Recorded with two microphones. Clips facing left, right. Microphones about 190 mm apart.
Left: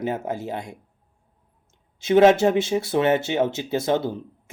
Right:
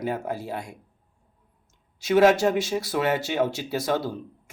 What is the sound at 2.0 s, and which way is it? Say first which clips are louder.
Speech: left 3 dB; 25° left (ahead or behind).